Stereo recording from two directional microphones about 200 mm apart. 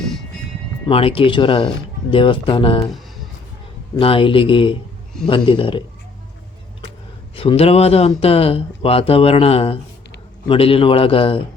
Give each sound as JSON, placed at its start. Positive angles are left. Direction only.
{"t": 0.9, "sound": "speech", "side_deg": 30}
{"t": 3.9, "sound": "speech", "side_deg": 25}
{"t": 7.3, "sound": "speech", "side_deg": 30}